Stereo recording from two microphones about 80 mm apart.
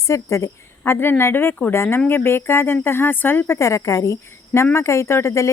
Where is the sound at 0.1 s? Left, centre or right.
Left.